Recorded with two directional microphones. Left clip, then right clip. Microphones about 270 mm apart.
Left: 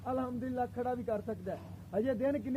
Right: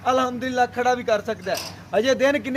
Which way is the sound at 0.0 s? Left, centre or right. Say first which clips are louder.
Right 16 dB; centre.